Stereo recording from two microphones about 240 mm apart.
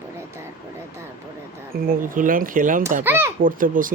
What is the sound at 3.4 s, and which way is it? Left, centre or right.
Speech, right.